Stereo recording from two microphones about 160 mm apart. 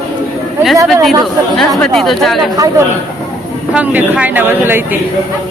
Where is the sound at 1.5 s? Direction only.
Centre (ahead or behind).